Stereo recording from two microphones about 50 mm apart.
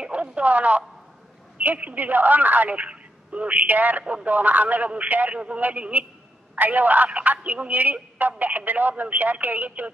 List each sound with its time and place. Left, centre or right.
0.0 s radio: right
1.6 s speech: right